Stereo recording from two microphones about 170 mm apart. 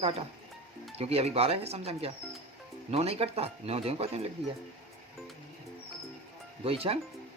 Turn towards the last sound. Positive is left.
turn(degrees=-35)  # may be behind; listen again after turning